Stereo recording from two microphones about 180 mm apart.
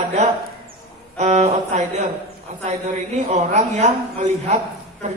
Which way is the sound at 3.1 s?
40° right (ahead or behind).